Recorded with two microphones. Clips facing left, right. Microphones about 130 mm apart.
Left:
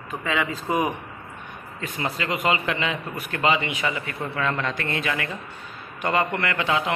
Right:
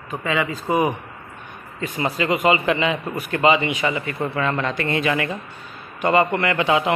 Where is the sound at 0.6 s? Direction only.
5° right (ahead or behind).